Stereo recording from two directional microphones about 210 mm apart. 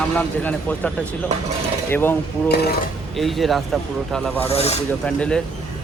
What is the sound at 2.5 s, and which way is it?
Speech, 50° left (ahead or behind).